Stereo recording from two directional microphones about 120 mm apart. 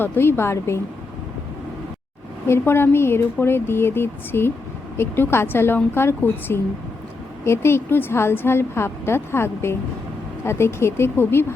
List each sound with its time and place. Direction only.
0.0 s a woman's voice: 20° left (ahead or behind)
2.5 s a woman's voice: 20° left (ahead or behind)